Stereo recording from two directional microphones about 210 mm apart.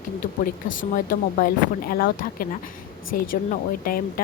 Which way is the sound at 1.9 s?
45° left (ahead or behind).